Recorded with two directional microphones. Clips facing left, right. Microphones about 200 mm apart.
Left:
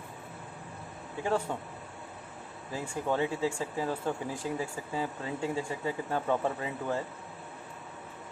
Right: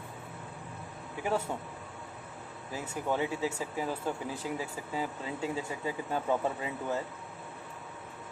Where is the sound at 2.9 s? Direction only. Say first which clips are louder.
Left 1 dB; 10° right (ahead or behind).